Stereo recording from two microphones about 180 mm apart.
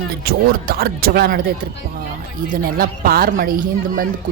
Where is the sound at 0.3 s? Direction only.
55° right (ahead or behind).